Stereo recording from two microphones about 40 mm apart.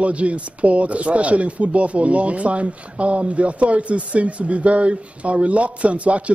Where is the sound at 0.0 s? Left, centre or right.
Right.